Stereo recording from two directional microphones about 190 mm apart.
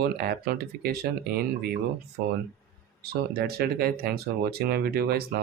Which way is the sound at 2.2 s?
45° right (ahead or behind).